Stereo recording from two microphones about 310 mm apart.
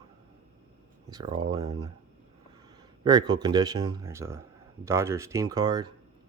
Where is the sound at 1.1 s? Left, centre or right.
Centre.